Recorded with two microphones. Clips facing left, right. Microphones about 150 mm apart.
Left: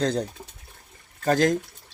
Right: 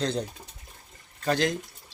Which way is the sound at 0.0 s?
45° left (ahead or behind).